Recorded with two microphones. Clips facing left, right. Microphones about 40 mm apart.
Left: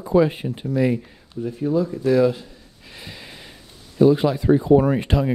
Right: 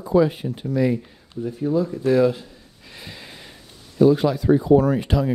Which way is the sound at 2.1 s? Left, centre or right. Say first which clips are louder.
Even; centre.